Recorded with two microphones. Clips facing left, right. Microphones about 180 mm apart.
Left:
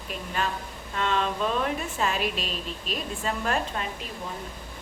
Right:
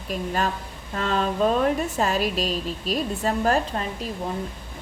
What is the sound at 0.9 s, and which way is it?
Speech, 40° right (ahead or behind).